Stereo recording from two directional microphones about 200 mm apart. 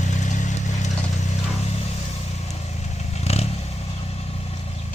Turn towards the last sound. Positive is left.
turn(degrees=30)  # may be behind; listen again after turning